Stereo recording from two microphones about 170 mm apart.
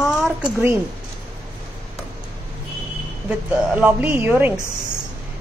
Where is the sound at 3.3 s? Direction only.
10° right (ahead or behind).